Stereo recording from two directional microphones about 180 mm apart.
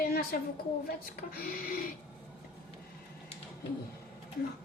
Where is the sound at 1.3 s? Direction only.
55° left (ahead or behind).